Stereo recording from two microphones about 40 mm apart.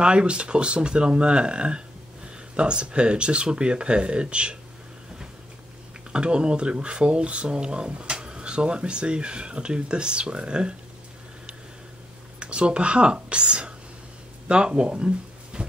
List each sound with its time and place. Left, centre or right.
0.0 s speech: right
6.1 s speech: right
12.4 s speech: right